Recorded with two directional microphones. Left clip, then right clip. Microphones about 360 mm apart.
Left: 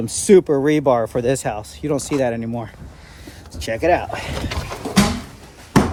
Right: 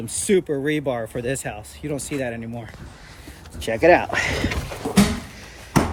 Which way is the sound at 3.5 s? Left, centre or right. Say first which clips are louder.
Left 1 dB; centre.